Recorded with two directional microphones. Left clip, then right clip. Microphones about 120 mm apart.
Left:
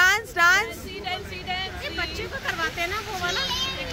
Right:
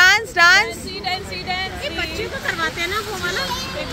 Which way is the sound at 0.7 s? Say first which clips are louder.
Right 6 dB; 15° left (ahead or behind).